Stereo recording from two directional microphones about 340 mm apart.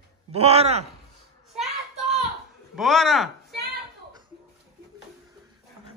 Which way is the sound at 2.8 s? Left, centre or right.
Centre.